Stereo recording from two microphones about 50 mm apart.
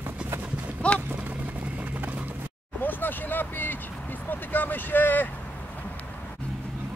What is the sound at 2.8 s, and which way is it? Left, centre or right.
Vehicle, left.